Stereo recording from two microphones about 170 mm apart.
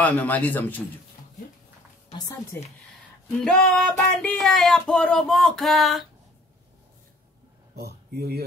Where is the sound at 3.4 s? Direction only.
Centre (ahead or behind).